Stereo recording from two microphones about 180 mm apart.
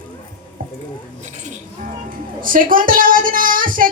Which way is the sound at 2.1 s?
50° right (ahead or behind).